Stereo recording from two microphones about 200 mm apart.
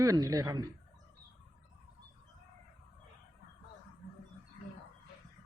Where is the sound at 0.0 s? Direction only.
15° right (ahead or behind).